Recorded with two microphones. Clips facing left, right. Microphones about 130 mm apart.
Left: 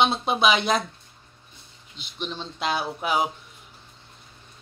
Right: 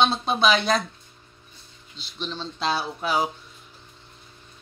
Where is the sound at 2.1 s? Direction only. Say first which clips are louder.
Even; 15° left (ahead or behind).